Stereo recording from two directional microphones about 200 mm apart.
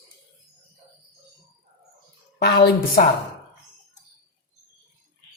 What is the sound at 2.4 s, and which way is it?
Speech, 55° left (ahead or behind).